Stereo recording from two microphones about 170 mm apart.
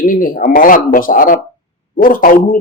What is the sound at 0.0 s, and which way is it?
A man's voice, 55° left (ahead or behind).